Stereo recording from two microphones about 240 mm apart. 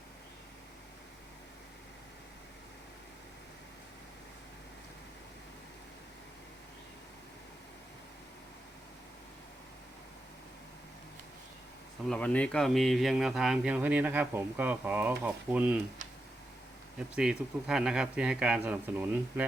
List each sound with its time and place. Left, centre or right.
12.0 s speech: centre
17.2 s speech: centre